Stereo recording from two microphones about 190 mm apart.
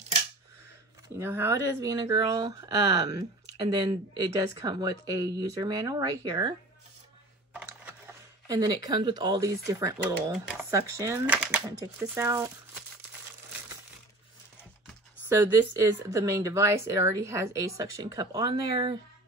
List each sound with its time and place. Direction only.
1.2 s speech: 15° right (ahead or behind)
7.5 s a sound: 10° right (ahead or behind)
8.5 s speech: 20° right (ahead or behind)
10.3 s speech: 5° right (ahead or behind)
10.7 s speech: 15° right (ahead or behind)
15.2 s speech: 10° right (ahead or behind)